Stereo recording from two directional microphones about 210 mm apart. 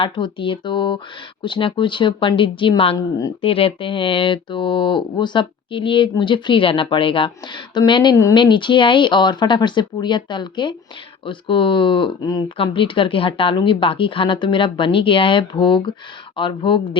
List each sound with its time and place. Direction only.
0.0 s speech: 25° left (ahead or behind)